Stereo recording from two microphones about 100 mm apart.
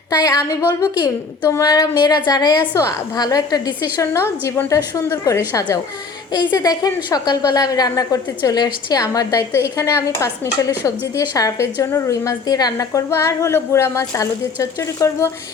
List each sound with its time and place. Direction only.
0.1 s a woman's voice: 35° left (ahead or behind)
4.0 s a woman's voice: 25° left (ahead or behind)
6.3 s a woman's voice: 40° left (ahead or behind)